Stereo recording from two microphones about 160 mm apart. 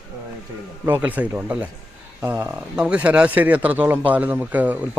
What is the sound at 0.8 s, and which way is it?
A man's voice, 10° right (ahead or behind).